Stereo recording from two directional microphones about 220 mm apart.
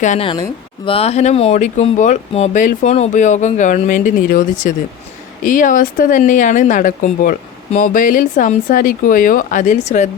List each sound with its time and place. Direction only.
0.0 s a woman's voice: 30° left (ahead or behind)